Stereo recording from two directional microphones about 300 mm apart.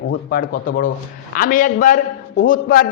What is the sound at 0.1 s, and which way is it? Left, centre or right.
A man's voice, left.